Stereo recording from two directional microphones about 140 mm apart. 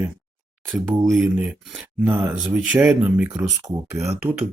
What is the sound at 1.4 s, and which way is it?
Speech, 5° right (ahead or behind).